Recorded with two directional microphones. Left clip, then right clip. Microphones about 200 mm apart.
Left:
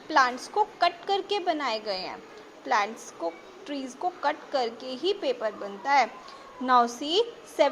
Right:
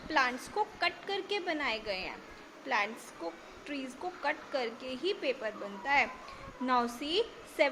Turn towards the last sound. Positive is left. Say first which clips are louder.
# left 6 dB
turn(degrees=15)  # may be behind; listen again after turning